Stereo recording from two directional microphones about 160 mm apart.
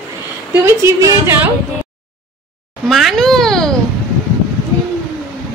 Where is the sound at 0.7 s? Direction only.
15° right (ahead or behind).